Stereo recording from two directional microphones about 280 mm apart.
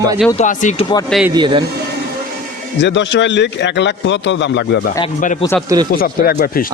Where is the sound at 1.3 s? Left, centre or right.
Centre.